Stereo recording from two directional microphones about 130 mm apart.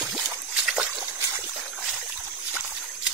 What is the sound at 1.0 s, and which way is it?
Trickle, 20° right (ahead or behind).